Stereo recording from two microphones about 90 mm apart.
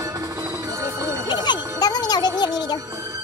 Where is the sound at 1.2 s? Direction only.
55° left (ahead or behind).